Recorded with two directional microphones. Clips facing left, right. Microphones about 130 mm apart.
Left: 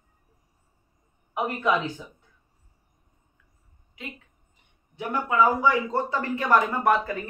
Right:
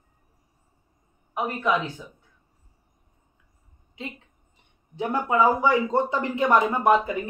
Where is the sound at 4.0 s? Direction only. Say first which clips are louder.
Right 3 dB; 25° right (ahead or behind).